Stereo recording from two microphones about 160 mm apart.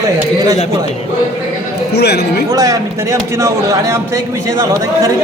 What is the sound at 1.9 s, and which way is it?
Speech, 90° left.